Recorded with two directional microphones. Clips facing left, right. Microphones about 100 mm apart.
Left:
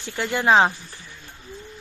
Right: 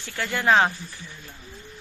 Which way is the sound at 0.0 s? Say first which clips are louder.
Left 2 dB; 20° left (ahead or behind).